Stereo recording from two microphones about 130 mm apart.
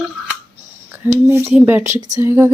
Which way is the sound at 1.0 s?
20° right (ahead or behind).